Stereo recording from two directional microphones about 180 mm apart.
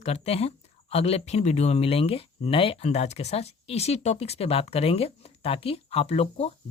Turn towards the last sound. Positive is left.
turn(degrees=35)  # may be behind; listen again after turning